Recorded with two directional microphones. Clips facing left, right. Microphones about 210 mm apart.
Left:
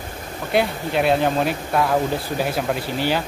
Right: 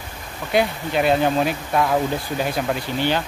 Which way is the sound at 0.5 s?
Centre (ahead or behind).